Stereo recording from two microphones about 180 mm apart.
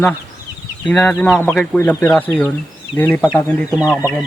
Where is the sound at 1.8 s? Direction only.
10° left (ahead or behind).